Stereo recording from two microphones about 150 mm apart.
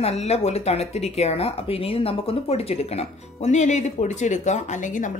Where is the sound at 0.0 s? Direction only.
45° left (ahead or behind).